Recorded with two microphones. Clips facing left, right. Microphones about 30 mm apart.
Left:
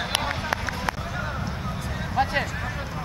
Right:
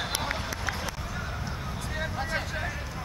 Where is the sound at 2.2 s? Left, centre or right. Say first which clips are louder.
Left 10 dB; left.